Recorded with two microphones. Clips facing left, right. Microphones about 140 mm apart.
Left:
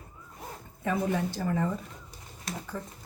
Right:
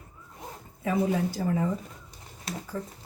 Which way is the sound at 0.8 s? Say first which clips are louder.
Right 2 dB; 10° right (ahead or behind).